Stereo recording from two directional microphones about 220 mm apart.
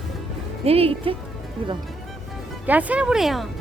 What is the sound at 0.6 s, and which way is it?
Speech, 25° right (ahead or behind).